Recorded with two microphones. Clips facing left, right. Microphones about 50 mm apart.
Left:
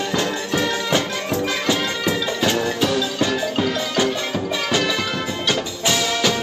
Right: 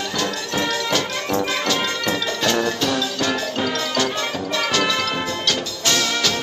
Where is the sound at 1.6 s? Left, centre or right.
Centre.